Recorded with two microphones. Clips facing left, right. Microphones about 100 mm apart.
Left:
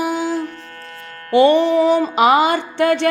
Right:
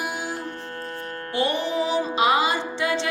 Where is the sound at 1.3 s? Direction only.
65° left (ahead or behind).